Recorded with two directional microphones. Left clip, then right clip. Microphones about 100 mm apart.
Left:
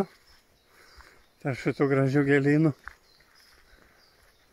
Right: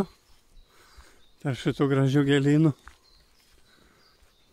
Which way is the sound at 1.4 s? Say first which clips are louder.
Even; 20° right (ahead or behind).